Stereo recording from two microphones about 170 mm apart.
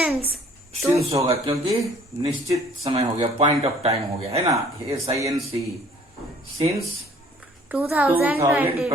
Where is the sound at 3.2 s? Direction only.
40° right (ahead or behind).